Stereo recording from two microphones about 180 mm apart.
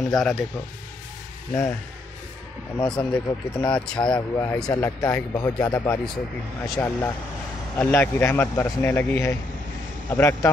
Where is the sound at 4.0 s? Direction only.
15° left (ahead or behind).